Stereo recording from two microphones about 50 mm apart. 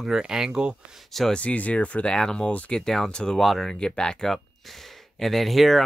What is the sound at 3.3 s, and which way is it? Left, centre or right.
Speech, centre.